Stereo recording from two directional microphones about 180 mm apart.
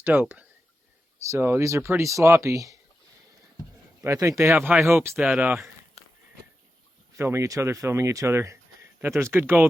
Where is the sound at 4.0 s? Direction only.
20° right (ahead or behind).